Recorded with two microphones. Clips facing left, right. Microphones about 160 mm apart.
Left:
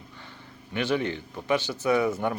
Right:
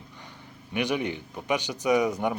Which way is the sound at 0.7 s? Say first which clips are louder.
Left 1 dB; 15° right (ahead or behind).